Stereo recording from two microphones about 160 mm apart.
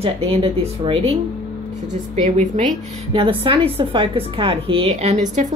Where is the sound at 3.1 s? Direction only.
35° right (ahead or behind).